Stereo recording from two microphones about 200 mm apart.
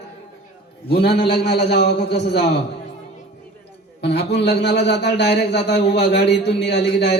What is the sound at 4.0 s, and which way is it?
A man's voice, 60° left (ahead or behind).